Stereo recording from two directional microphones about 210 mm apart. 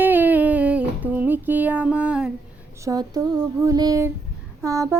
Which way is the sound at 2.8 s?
15° right (ahead or behind).